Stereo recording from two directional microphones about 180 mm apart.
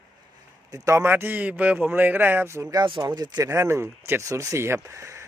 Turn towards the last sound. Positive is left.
turn(degrees=-15)  # may be behind; listen again after turning